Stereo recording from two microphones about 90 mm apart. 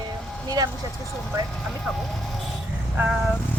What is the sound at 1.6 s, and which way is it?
Speech, centre (ahead or behind).